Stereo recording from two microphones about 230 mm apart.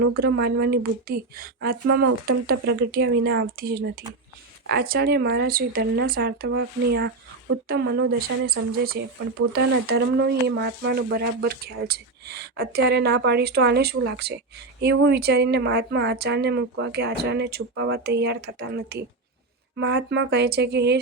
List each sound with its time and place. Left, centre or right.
0.1 s speech: right